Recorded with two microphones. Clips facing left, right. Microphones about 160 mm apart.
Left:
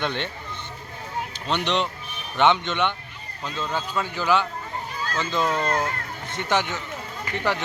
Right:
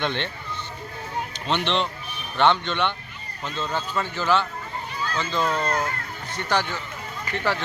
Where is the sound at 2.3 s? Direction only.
15° left (ahead or behind).